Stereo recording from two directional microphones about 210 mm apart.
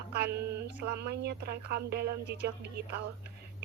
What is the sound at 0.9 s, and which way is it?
A woman's voice, 50° right (ahead or behind).